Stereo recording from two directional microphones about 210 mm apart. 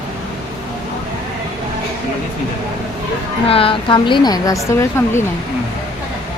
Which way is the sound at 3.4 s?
25° left (ahead or behind).